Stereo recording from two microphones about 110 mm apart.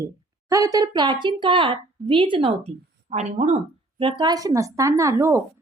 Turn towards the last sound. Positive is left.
turn(degrees=-25)  # may be behind; listen again after turning